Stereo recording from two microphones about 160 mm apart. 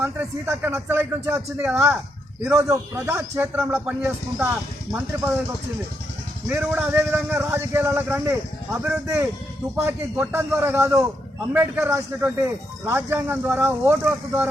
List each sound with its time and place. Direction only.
0.0 s speech: 10° right (ahead or behind)
6.5 s speech: 15° right (ahead or behind)